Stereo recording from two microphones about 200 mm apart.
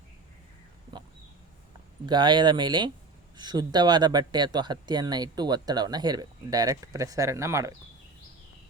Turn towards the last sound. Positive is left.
turn(degrees=-15)  # may be behind; listen again after turning